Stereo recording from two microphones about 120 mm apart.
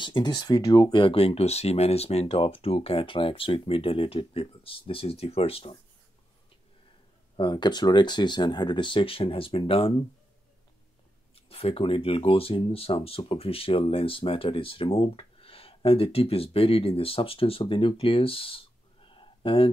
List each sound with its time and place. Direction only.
0.0 s speech: 40° left (ahead or behind); by 5.8 s 55° left (ahead or behind)
7.3 s speech: 40° left (ahead or behind)
11.3 s speech: 55° left (ahead or behind)